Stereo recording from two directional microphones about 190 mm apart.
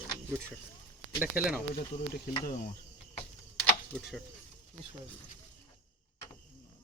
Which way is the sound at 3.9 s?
Centre (ahead or behind).